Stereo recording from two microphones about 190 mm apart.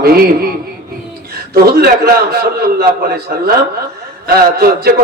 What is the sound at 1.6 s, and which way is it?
A man's voice, 55° right (ahead or behind).